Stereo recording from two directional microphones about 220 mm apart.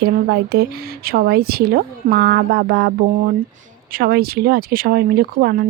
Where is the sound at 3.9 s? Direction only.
45° right (ahead or behind).